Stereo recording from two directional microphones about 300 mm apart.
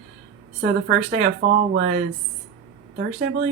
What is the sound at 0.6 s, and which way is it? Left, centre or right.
A woman's voice, right.